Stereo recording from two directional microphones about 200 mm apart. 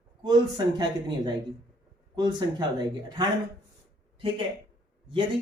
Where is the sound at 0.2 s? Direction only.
20° right (ahead or behind).